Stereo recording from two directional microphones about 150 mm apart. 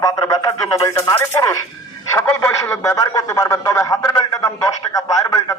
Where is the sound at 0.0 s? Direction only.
25° left (ahead or behind).